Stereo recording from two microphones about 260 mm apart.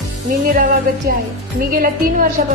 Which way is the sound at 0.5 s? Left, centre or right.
Right.